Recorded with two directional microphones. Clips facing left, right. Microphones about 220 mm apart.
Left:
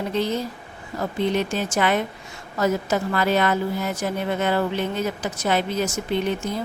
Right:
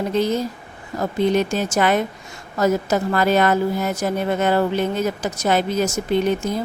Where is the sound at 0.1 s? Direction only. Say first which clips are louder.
Right 4 dB; 45° right (ahead or behind).